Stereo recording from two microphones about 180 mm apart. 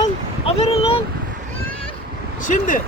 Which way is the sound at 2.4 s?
45° left (ahead or behind).